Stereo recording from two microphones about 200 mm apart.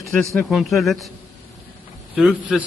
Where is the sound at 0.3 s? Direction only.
Centre (ahead or behind).